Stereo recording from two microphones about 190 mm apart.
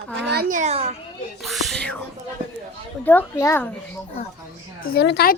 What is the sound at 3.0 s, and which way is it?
Speech, 10° left (ahead or behind).